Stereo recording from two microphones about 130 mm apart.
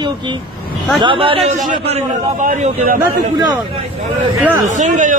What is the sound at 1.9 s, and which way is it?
A man's voice, 65° right (ahead or behind).